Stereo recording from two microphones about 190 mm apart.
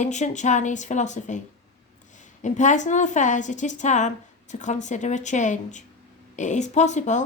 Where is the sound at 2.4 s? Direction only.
40° left (ahead or behind).